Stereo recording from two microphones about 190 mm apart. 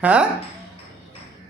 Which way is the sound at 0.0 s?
10° right (ahead or behind).